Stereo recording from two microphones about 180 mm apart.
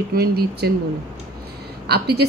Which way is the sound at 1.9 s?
65° right (ahead or behind).